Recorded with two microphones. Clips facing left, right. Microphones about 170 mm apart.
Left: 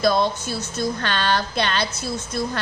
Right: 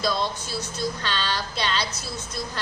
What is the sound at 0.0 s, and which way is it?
A woman's voice, 55° left (ahead or behind).